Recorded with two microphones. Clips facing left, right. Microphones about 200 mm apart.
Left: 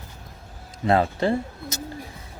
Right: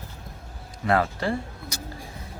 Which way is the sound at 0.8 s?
25° left (ahead or behind).